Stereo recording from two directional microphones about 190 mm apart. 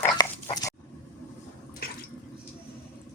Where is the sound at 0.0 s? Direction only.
20° left (ahead or behind).